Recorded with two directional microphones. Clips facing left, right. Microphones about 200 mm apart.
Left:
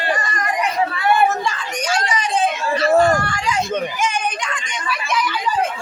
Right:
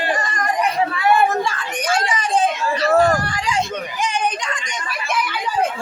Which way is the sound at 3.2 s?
35° right (ahead or behind).